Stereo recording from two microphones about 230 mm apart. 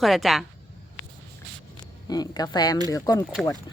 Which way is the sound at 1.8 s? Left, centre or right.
Centre.